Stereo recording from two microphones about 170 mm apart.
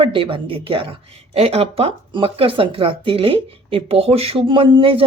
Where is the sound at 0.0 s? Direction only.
30° right (ahead or behind).